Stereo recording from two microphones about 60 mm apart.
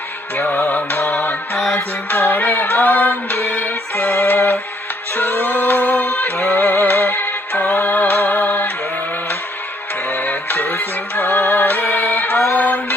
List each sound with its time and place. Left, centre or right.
0.5 s music: left
1.7 s music: left
6.3 s music: left
7.2 s music: left
10.1 s music: left